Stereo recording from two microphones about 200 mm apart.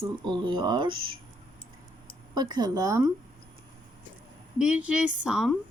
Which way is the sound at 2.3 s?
20° right (ahead or behind).